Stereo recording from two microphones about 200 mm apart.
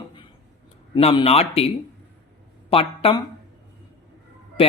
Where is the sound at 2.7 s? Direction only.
25° left (ahead or behind).